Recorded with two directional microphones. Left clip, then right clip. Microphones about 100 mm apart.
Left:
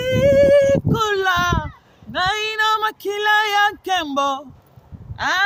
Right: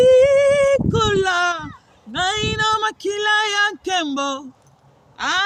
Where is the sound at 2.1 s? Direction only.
35° left (ahead or behind).